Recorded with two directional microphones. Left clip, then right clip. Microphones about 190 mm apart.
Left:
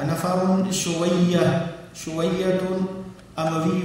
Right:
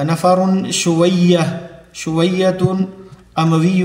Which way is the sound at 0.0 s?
30° right (ahead or behind).